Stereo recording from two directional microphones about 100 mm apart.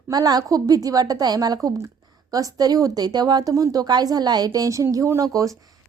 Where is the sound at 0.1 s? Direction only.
40° right (ahead or behind).